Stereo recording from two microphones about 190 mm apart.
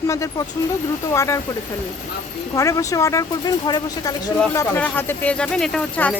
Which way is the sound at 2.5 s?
15° left (ahead or behind).